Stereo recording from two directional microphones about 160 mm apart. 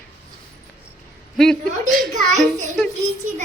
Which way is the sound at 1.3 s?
5° left (ahead or behind).